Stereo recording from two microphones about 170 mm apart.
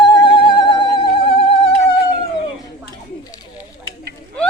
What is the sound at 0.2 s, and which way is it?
Music, 30° left (ahead or behind).